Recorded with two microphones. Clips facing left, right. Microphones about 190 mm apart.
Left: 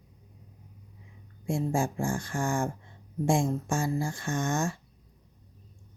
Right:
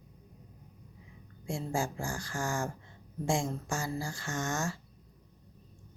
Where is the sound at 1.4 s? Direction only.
25° left (ahead or behind).